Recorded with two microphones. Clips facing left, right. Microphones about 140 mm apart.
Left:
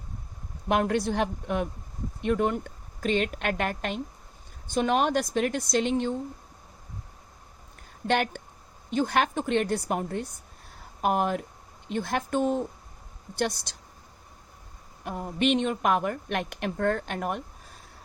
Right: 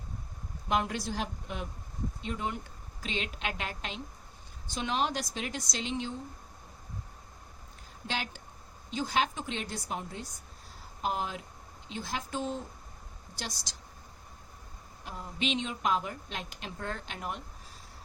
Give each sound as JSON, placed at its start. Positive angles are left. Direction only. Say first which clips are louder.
{"t": 0.7, "sound": "a woman's voice", "louder": "left 6 dB", "side_deg": 55}
{"t": 8.0, "sound": "a woman's voice", "louder": "left 11 dB", "side_deg": 55}
{"t": 15.0, "sound": "a woman's voice", "louder": "left 9 dB", "side_deg": 55}